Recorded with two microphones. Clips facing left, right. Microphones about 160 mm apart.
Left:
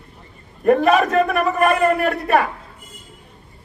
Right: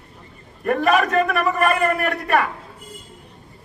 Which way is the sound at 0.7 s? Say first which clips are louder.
Left 4 dB; 35° left (ahead or behind).